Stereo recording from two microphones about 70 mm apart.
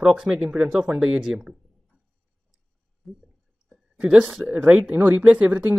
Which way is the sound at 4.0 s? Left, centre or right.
Centre.